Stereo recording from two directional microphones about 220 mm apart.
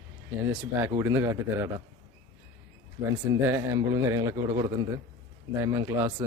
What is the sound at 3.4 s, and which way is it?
Speech, 10° right (ahead or behind).